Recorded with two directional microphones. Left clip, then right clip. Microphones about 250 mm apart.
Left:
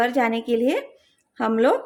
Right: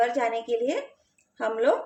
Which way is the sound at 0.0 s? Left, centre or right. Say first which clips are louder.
Left 3 dB; left.